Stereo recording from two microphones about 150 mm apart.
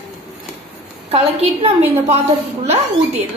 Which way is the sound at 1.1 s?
40° right (ahead or behind).